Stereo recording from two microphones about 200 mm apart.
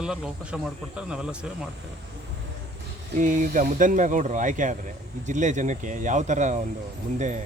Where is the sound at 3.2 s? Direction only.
40° right (ahead or behind).